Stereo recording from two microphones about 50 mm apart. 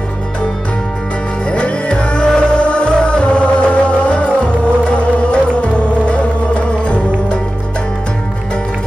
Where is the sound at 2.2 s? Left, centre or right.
Centre.